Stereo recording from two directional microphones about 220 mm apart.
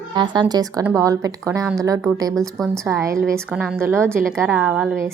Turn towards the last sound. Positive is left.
turn(degrees=0)  # may be behind; listen again after turning